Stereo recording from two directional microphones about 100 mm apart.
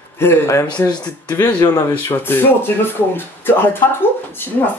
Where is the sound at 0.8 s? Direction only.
45° left (ahead or behind).